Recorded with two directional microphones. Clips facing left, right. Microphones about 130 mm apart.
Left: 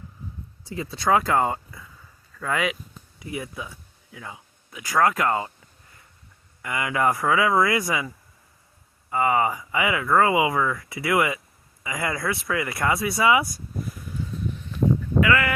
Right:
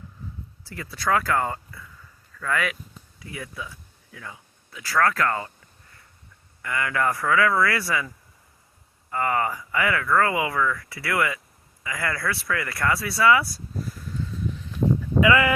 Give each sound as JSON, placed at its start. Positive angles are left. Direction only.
{"t": 0.6, "sound": "speech", "side_deg": 20}
{"t": 6.6, "sound": "speech", "side_deg": 15}
{"t": 9.0, "sound": "speech", "side_deg": 10}